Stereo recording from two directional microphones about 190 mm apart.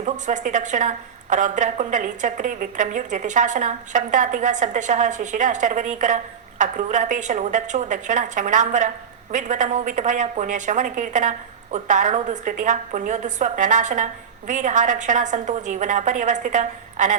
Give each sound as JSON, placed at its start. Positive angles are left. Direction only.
{"t": 0.0, "sound": "a woman's voice", "side_deg": -40}